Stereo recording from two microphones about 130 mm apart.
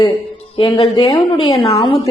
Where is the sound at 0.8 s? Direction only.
50° left (ahead or behind).